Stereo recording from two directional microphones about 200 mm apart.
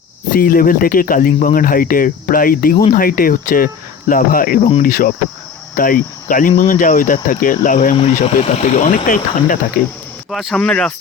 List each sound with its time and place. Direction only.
0.3 s speech: 45° left (ahead or behind)
5.7 s cricket: 45° left (ahead or behind)
6.6 s speech: 40° left (ahead or behind)
10.2 s speech: centre (ahead or behind)